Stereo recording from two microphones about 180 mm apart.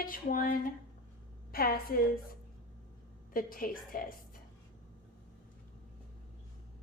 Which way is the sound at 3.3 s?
50° left (ahead or behind).